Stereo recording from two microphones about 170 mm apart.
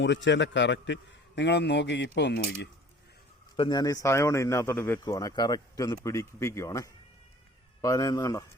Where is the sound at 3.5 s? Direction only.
25° left (ahead or behind).